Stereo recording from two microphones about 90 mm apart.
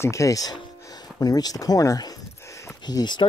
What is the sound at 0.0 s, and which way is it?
Speech, 35° left (ahead or behind).